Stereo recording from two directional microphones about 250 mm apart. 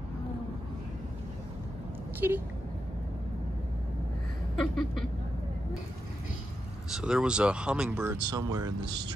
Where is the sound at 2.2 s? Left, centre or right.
Centre.